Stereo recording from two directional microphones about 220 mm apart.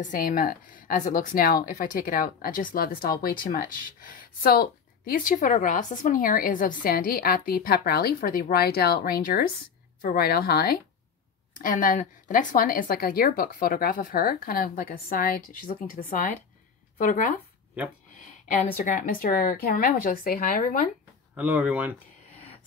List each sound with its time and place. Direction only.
0.0 s a woman's voice: 40° left (ahead or behind)
21.4 s speech: 5° right (ahead or behind)